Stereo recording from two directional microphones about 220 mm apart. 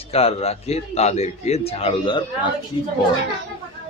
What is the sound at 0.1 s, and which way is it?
A man's voice, 25° left (ahead or behind).